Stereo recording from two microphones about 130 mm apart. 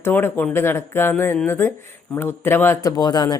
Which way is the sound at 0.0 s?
15° left (ahead or behind).